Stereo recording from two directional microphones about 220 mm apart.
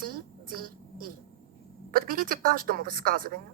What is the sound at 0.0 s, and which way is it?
A woman's voice, 40° right (ahead or behind).